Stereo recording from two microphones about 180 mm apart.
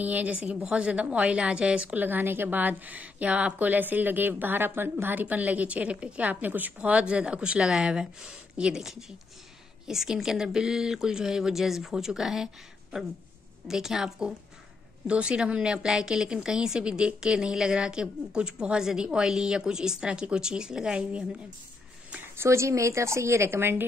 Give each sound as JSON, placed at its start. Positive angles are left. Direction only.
{"t": 0.0, "sound": "a woman's voice", "side_deg": -10}
{"t": 13.7, "sound": "a woman's voice", "side_deg": -5}
{"t": 22.1, "sound": "a woman's voice", "side_deg": -15}